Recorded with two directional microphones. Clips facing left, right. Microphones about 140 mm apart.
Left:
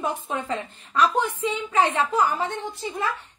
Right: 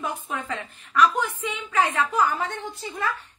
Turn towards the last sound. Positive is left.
turn(degrees=25)  # may be behind; listen again after turning